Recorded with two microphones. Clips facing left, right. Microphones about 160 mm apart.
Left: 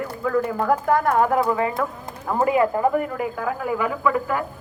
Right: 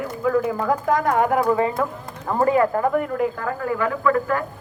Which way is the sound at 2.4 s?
15° left (ahead or behind).